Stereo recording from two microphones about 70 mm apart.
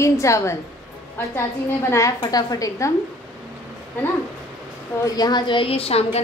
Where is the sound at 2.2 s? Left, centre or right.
Left.